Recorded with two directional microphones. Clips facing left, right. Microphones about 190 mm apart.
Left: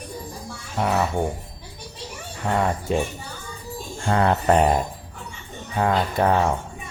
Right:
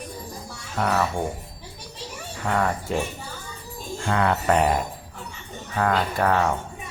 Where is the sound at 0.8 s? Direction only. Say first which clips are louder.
Left 1 dB; 15° left (ahead or behind).